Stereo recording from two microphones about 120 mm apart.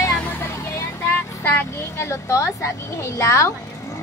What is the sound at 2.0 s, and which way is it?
A woman's voice, 25° left (ahead or behind).